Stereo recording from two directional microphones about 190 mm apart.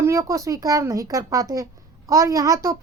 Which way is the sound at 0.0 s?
15° right (ahead or behind).